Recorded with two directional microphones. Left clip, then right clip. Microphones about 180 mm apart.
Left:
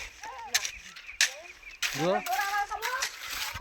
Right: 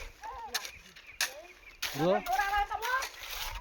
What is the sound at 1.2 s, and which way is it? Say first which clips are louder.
Chop: left 7 dB; 45° right (ahead or behind).